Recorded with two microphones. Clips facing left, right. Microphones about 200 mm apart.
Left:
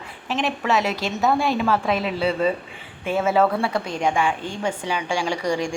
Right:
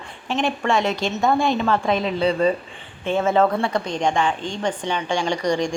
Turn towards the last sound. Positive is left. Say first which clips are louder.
# right 2 dB
turn(degrees=5)  # may be behind; listen again after turning